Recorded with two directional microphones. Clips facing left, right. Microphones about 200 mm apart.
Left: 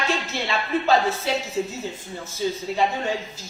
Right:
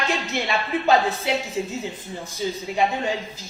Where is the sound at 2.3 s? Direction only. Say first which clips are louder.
Left 2 dB; 15° right (ahead or behind).